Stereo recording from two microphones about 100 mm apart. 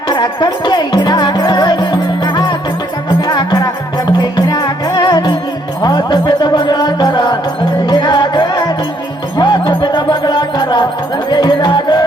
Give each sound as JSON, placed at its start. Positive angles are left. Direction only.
{"t": 0.1, "sound": "music", "side_deg": 45}